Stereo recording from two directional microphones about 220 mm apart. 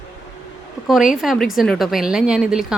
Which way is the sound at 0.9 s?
5° right (ahead or behind).